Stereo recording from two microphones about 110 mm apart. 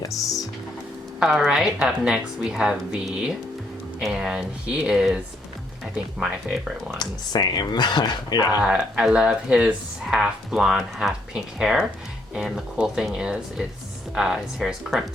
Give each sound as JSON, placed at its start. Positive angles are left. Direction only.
{"t": 1.2, "sound": "a woman's voice", "side_deg": -5}
{"t": 7.0, "sound": "speech", "side_deg": 40}
{"t": 8.6, "sound": "a woman's voice", "side_deg": -10}